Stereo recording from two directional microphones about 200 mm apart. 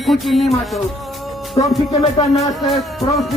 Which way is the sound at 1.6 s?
30° left (ahead or behind).